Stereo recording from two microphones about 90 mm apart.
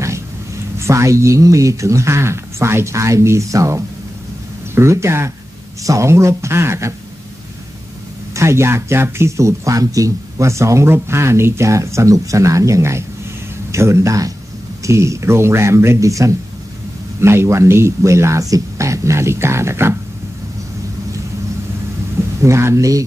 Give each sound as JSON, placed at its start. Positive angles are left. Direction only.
{"t": 0.7, "sound": "speech", "side_deg": -35}
{"t": 8.4, "sound": "speech", "side_deg": -30}
{"t": 22.4, "sound": "speech", "side_deg": -30}